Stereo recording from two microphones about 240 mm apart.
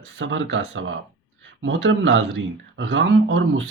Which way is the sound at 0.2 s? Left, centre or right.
Right.